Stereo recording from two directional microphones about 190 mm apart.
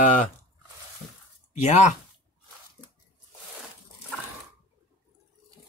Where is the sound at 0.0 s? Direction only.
40° left (ahead or behind).